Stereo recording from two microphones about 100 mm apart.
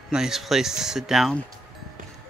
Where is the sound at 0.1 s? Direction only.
5° right (ahead or behind).